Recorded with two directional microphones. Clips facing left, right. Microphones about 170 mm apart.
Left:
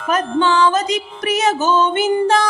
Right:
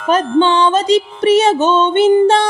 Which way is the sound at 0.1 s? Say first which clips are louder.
Right 4 dB; 30° right (ahead or behind).